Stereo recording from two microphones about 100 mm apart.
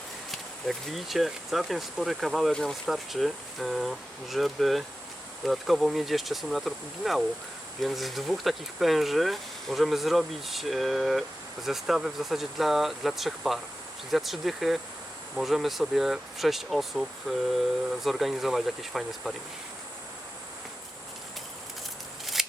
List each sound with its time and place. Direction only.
0.3 s speech: centre (ahead or behind)
22.4 s scissors: 5° right (ahead or behind)